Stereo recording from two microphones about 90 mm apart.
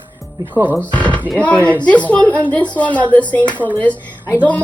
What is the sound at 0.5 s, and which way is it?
Speech, 20° right (ahead or behind).